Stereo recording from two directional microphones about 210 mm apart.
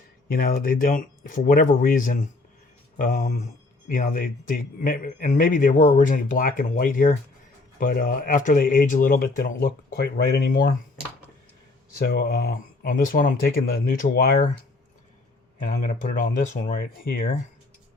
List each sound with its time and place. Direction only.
0.3 s speech: 40° left (ahead or behind)
11.9 s speech: 45° left (ahead or behind)
15.6 s speech: 35° left (ahead or behind)